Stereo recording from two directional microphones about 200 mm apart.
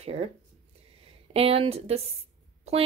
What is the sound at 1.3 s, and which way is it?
Speech, 30° right (ahead or behind).